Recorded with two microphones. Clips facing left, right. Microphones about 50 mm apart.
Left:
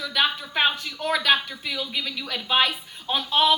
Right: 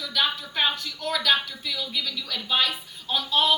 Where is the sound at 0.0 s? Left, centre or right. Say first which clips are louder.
Left 3 dB; left.